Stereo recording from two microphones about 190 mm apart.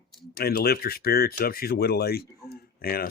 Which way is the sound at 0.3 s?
55° left (ahead or behind).